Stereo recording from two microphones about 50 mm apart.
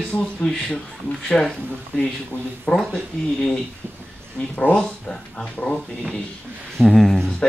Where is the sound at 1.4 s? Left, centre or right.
Centre.